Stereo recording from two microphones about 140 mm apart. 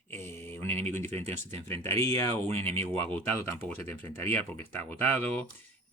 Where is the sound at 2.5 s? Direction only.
45° right (ahead or behind).